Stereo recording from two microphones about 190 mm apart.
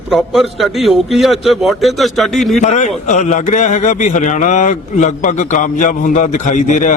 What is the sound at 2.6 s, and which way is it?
A man's voice, 40° left (ahead or behind).